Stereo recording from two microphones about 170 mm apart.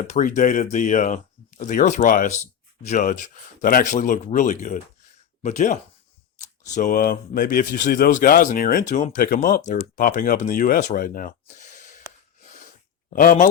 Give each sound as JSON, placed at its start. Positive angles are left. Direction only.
{"t": 0.0, "sound": "speech", "side_deg": 50}
{"t": 13.1, "sound": "speech", "side_deg": 50}